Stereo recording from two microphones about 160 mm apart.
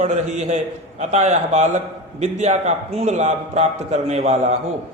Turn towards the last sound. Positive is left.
turn(degrees=-40)  # may be behind; listen again after turning